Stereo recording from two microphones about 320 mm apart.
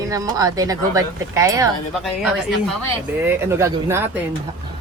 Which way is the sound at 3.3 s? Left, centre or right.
Centre.